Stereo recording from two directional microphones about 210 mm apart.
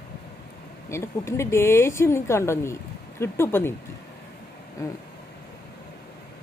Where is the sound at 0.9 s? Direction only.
15° left (ahead or behind).